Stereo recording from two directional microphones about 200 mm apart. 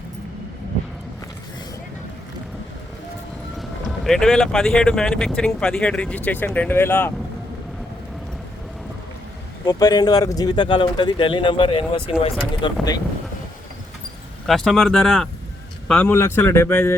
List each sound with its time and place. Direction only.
3.6 s speech: centre (ahead or behind)
9.6 s speech: 20° left (ahead or behind)
14.4 s speech: centre (ahead or behind)